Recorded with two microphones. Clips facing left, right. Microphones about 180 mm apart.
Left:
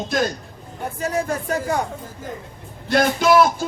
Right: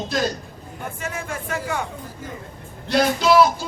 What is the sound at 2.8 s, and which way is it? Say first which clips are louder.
Speech: left 1 dB; 50° left (ahead or behind).